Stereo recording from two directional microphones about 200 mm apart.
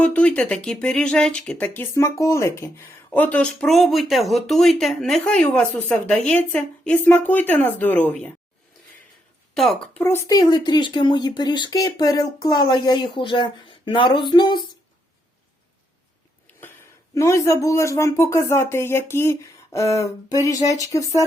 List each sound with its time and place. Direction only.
0.0 s speech: 5° left (ahead or behind)
9.6 s speech: centre (ahead or behind); by 14.6 s 20° left (ahead or behind)
17.2 s speech: 15° left (ahead or behind)